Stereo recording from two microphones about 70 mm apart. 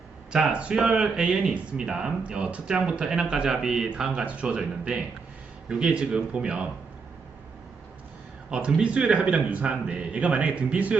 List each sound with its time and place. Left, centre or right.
0.3 s speech: centre
8.4 s speech: centre